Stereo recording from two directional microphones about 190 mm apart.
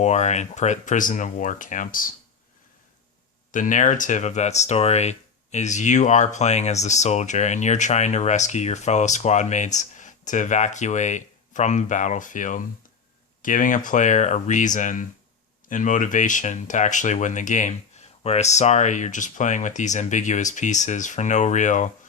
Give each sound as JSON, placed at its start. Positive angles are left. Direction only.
{"t": 0.0, "sound": "speech", "side_deg": 35}
{"t": 3.5, "sound": "speech", "side_deg": 40}